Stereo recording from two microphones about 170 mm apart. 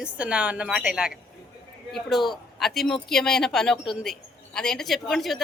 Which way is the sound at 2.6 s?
Centre (ahead or behind).